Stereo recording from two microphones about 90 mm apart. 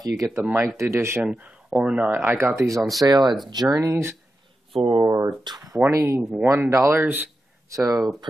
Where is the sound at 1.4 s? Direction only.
15° right (ahead or behind).